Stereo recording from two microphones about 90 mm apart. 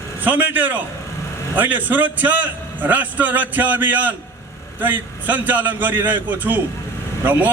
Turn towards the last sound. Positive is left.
turn(degrees=-20)  # may be behind; listen again after turning